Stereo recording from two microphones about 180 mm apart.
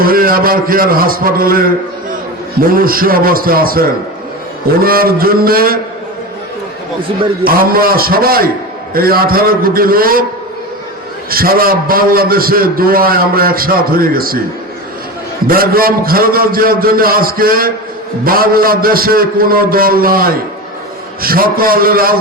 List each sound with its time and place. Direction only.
0.0 s a man's voice: 55° right (ahead or behind)
7.4 s a man's voice: 55° right (ahead or behind)
11.3 s a man's voice: 55° right (ahead or behind)
15.4 s a man's voice: 55° right (ahead or behind)